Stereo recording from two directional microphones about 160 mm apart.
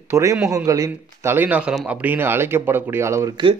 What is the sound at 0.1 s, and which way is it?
Speech, 20° right (ahead or behind).